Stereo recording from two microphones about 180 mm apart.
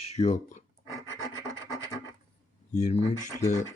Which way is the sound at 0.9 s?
15° right (ahead or behind).